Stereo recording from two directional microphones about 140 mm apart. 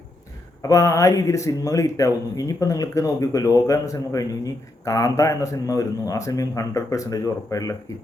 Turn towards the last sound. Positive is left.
turn(degrees=25)  # may be behind; listen again after turning